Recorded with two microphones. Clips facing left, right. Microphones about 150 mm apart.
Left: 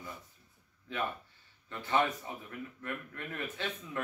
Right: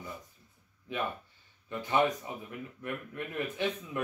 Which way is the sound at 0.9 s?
15° right (ahead or behind).